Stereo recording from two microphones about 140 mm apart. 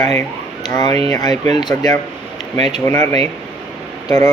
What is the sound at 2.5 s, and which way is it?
Speech, 50° right (ahead or behind).